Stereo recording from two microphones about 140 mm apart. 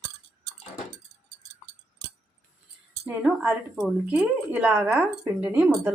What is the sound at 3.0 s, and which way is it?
Speech, 10° right (ahead or behind).